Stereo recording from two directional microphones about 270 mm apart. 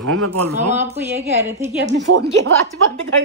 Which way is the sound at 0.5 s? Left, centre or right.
Centre.